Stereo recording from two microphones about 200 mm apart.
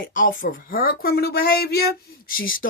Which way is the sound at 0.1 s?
40° left (ahead or behind).